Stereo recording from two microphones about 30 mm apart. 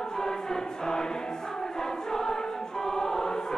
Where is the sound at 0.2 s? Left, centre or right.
Left.